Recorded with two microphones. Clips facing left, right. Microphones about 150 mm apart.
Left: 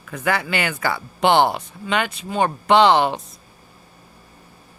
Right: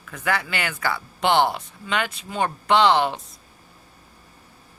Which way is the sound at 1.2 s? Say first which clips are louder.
Left 3 dB; 65° left (ahead or behind).